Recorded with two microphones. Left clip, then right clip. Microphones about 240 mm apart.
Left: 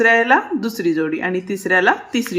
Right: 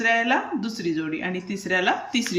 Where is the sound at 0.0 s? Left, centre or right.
Centre.